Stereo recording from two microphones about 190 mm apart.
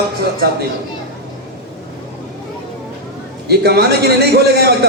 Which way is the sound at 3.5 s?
55° right (ahead or behind).